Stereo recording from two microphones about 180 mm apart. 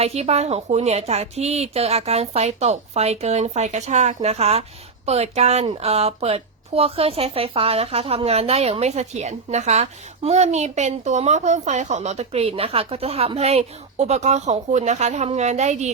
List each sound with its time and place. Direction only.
0.0 s a woman's voice: 35° right (ahead or behind)